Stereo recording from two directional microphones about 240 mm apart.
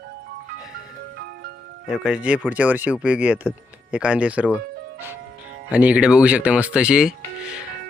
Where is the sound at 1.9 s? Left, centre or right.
Centre.